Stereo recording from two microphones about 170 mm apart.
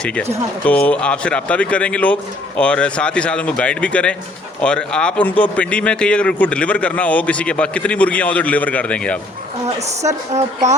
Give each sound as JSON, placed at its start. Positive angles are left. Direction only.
{"t": 0.0, "sound": "a man's voice", "side_deg": 5}
{"t": 9.6, "sound": "a woman's voice", "side_deg": -40}